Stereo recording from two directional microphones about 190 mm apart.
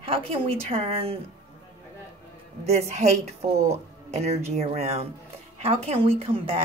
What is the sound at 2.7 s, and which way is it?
A woman's voice, 35° right (ahead or behind).